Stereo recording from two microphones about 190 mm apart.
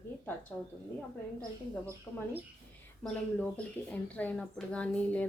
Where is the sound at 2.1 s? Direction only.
5° left (ahead or behind).